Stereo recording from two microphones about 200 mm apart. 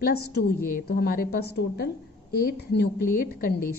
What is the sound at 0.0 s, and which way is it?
A woman's voice, 50° left (ahead or behind).